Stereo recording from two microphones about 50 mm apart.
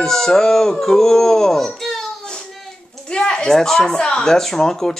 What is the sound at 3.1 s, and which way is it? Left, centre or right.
Speech, centre.